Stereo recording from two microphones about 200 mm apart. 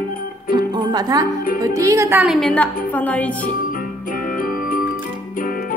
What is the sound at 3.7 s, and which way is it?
Music, 45° left (ahead or behind).